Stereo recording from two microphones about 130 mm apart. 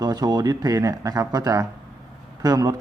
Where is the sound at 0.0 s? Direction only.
30° right (ahead or behind).